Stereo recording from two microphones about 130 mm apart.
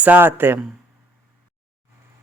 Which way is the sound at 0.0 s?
15° right (ahead or behind).